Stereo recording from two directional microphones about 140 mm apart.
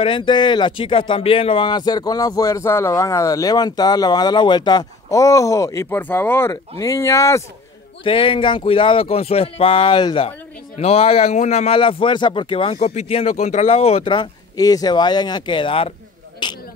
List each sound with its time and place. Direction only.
0.0 s speech: 35° left (ahead or behind)
8.0 s speech: 40° left (ahead or behind)
12.7 s speech: 50° left (ahead or behind); by 16.6 s 30° left (ahead or behind)